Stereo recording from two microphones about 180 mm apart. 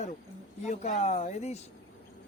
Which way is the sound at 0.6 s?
40° left (ahead or behind).